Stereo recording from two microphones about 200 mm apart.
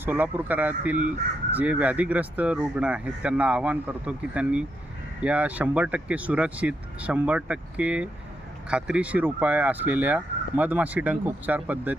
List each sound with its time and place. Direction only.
0.0 s speech: 10° right (ahead or behind)